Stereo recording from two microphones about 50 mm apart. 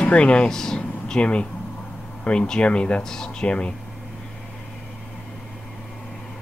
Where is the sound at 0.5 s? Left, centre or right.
Centre.